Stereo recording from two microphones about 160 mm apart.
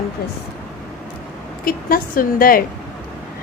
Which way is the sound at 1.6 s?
65° left (ahead or behind).